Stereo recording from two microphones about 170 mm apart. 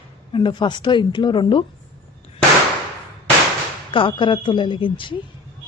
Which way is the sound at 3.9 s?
30° left (ahead or behind).